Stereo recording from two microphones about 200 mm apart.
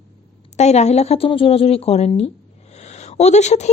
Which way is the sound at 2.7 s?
35° left (ahead or behind).